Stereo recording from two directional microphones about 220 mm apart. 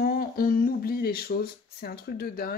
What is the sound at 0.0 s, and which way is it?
Speech, 40° left (ahead or behind).